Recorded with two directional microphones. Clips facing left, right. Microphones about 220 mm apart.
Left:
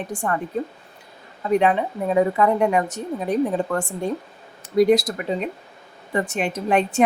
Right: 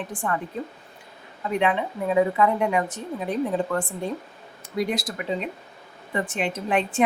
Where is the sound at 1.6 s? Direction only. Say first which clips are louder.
Left 3 dB; 40° left (ahead or behind).